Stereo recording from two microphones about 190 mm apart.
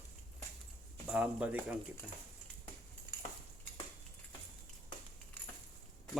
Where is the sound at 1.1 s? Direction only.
5° right (ahead or behind).